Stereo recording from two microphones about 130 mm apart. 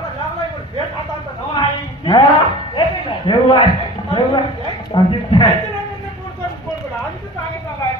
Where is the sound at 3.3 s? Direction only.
40° left (ahead or behind).